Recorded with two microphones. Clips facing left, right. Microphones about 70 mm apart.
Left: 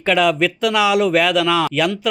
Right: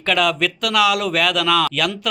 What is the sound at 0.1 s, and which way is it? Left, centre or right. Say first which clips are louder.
Speech: left 3 dB; centre.